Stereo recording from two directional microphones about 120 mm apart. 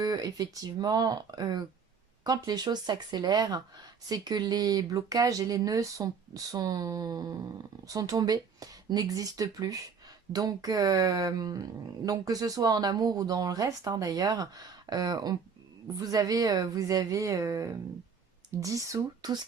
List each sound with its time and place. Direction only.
0.0 s a woman's voice: 35° right (ahead or behind)